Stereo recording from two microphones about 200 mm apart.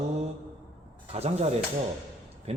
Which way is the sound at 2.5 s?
30° right (ahead or behind).